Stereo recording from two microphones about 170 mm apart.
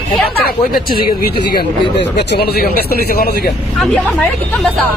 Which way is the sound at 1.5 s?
85° left.